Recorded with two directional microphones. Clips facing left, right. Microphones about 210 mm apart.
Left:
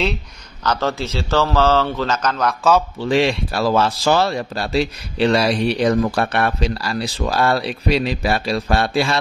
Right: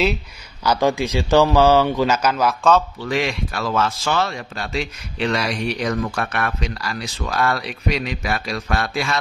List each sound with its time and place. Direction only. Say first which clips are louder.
0.7 s a man's voice: right 3 dB; 15° right (ahead or behind)
3.0 s speech: left 5 dB; 30° left (ahead or behind)